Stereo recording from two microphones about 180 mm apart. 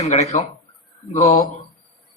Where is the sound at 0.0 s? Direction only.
40° left (ahead or behind).